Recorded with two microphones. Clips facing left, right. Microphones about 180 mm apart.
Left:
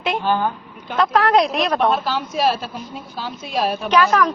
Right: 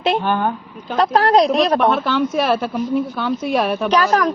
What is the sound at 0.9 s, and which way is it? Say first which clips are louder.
Speech: right 2 dB; 35° right (ahead or behind).